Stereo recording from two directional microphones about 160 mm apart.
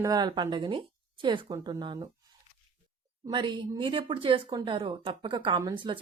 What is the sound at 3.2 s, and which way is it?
Speech, 30° right (ahead or behind).